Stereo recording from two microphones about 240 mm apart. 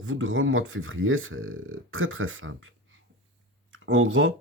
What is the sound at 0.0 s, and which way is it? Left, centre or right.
Speech, right.